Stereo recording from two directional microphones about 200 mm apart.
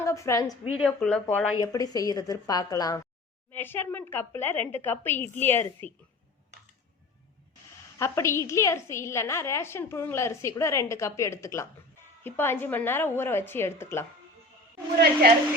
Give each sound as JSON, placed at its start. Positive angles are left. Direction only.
{"t": 0.0, "sound": "a woman's voice", "side_deg": 15}
{"t": 0.8, "sound": "speech", "side_deg": 0}
{"t": 1.5, "sound": "a woman's voice", "side_deg": 15}
{"t": 7.9, "sound": "a woman's voice", "side_deg": 15}